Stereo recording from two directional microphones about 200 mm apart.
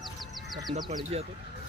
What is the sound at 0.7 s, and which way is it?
Speech, 20° right (ahead or behind).